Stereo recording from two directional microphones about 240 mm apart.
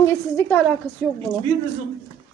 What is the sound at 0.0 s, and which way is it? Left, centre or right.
Speech, centre.